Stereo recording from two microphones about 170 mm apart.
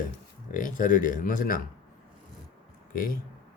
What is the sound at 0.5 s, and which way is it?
Speech, 50° left (ahead or behind).